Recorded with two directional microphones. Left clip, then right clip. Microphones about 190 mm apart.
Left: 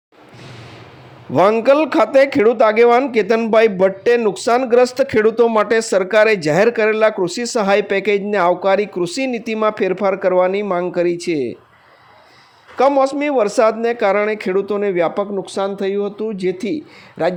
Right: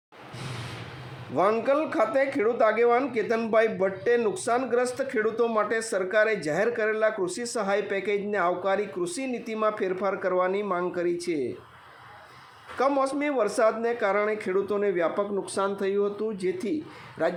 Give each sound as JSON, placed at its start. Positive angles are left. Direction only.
{"t": 1.4, "sound": "a man's voice", "side_deg": 40}
{"t": 12.7, "sound": "a man's voice", "side_deg": 35}